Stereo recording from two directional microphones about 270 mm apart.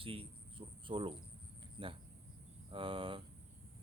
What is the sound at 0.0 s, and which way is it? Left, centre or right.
Speech, centre.